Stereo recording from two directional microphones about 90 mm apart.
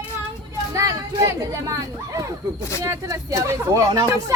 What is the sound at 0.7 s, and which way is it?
Speech, 40° right (ahead or behind).